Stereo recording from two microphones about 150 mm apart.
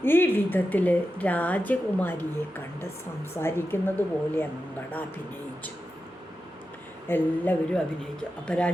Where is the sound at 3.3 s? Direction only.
15° left (ahead or behind).